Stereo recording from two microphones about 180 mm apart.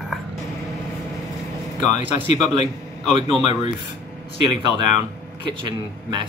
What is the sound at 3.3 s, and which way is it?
Speech, 35° left (ahead or behind).